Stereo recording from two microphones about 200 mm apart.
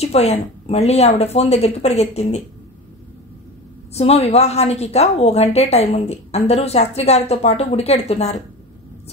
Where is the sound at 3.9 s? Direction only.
30° left (ahead or behind).